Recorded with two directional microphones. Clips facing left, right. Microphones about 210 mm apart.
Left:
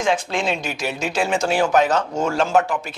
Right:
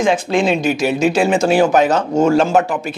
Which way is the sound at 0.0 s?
10° right (ahead or behind).